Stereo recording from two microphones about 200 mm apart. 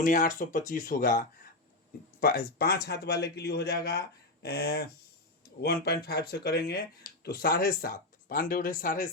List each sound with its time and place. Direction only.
0.0 s speech: 40° left (ahead or behind)
2.2 s speech: 45° left (ahead or behind)